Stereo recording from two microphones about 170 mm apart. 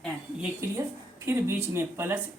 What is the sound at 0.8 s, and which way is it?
Speech, 15° right (ahead or behind).